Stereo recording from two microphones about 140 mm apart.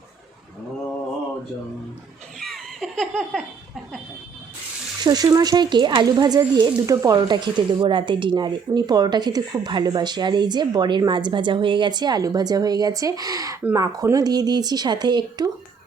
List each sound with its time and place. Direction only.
2.4 s laughter: centre (ahead or behind)
5.0 s speech: 30° right (ahead or behind)